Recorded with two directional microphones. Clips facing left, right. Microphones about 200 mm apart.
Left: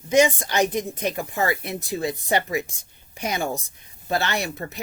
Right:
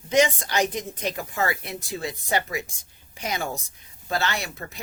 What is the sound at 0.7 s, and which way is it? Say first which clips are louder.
Speech: left 4 dB; 55° left (ahead or behind).